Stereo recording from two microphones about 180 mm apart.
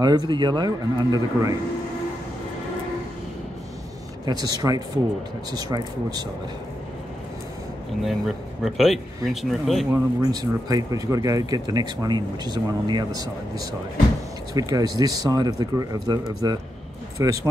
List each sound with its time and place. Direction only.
0.0 s speech: 25° right (ahead or behind)
4.3 s speech: 20° right (ahead or behind)
8.0 s speech: centre (ahead or behind)
9.8 s speech: 20° right (ahead or behind)
14.5 s speech: 20° right (ahead or behind)